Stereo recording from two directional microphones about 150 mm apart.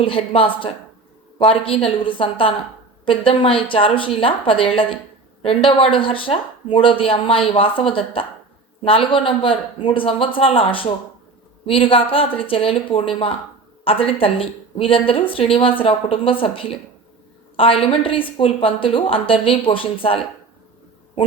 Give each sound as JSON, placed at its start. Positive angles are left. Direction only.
{"t": 0.0, "sound": "speech", "side_deg": 40}